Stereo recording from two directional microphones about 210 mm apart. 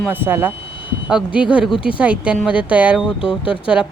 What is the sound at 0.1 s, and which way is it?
Speech, 10° right (ahead or behind).